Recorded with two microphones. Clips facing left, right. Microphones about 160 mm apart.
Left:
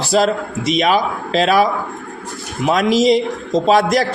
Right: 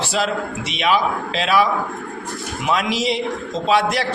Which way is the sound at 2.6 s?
40° left (ahead or behind).